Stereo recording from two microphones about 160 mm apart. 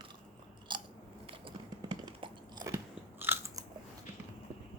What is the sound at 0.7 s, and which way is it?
Biting, 30° right (ahead or behind).